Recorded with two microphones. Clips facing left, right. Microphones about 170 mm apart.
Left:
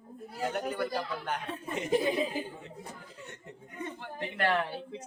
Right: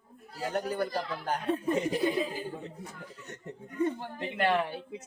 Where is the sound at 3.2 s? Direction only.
40° right (ahead or behind).